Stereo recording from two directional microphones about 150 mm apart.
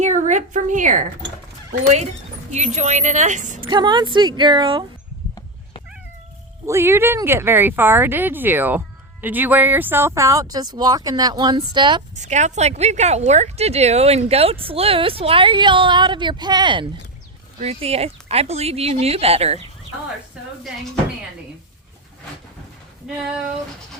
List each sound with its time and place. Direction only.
0.0 s a woman's voice: 50° right (ahead or behind)
2.5 s speech: 50° right (ahead or behind)
3.6 s speech: 30° right (ahead or behind)
6.7 s speech: 15° right (ahead or behind)
12.1 s speech: 50° right (ahead or behind)